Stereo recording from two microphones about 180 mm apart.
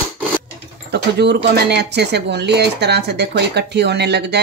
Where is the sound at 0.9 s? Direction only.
65° right (ahead or behind).